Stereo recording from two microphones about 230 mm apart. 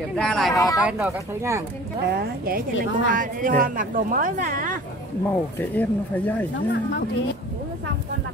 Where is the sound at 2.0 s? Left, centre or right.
Right.